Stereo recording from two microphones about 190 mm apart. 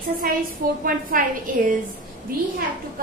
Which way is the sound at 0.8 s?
45° right (ahead or behind).